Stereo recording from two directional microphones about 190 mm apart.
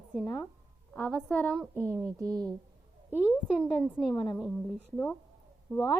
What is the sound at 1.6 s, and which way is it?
Speech, 15° right (ahead or behind).